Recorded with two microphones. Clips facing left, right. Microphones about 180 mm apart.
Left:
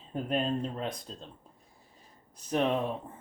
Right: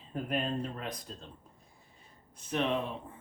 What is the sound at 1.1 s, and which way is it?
Speech, 30° left (ahead or behind).